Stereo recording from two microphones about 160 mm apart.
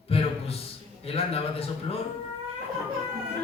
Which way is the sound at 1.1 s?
35° left (ahead or behind).